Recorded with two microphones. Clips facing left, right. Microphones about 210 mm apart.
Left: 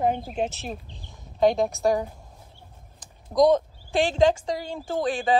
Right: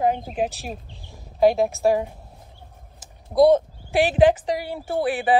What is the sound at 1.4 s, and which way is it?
Speech, centre (ahead or behind).